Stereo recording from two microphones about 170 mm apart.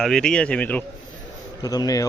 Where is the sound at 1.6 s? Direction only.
20° left (ahead or behind).